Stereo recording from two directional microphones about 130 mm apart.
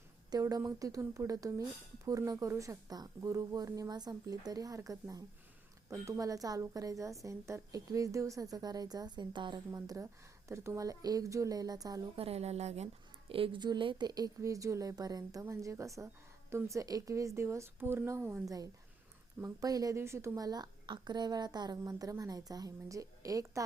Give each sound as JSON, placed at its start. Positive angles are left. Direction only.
{"t": 0.3, "sound": "a woman's voice", "side_deg": -30}
{"t": 12.1, "sound": "a woman's voice", "side_deg": -50}